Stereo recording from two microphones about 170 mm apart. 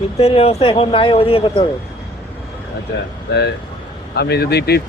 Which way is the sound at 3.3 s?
80° left.